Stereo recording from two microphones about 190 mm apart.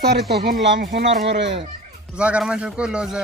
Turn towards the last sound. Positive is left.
turn(degrees=-5)  # may be behind; listen again after turning